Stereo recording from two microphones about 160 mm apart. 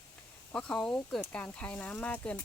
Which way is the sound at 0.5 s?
5° left (ahead or behind).